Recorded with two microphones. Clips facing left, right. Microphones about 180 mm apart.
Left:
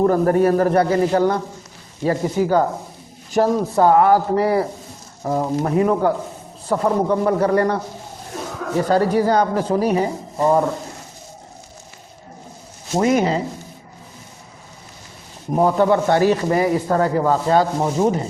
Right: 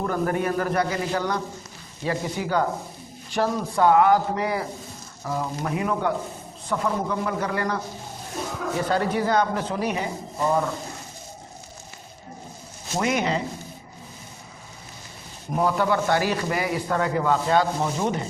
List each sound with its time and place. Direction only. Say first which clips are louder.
0.0 s a man's voice: left 9 dB; 35° left (ahead or behind)
8.9 s a man's voice: left 7 dB; 40° left (ahead or behind)
13.0 s a man's voice: left 7 dB; 40° left (ahead or behind)
15.8 s a man's voice: left 7 dB; 30° left (ahead or behind)